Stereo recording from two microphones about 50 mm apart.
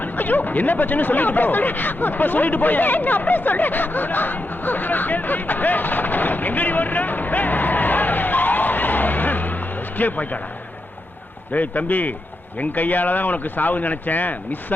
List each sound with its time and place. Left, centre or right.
0.0 s speech: left
11.5 s speech: left